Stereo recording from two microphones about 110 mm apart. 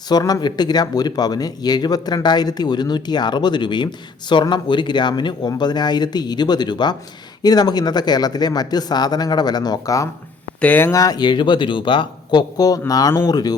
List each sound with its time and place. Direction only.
0.1 s speech: 35° left (ahead or behind)
10.6 s speech: 15° left (ahead or behind)
10.9 s speech: 35° left (ahead or behind)